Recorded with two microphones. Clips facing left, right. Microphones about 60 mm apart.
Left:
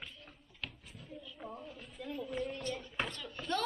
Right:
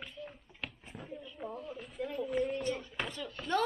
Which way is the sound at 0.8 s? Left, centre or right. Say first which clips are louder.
Right 5 dB; right.